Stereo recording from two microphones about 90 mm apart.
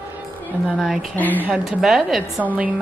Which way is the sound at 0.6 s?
5° right (ahead or behind).